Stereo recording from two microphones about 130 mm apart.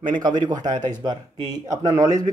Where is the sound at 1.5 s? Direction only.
30° right (ahead or behind).